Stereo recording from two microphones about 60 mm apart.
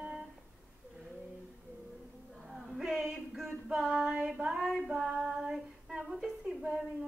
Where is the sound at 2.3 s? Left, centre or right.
Centre.